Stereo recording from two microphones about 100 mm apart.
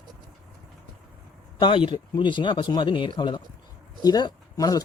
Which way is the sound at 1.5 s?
55° left (ahead or behind).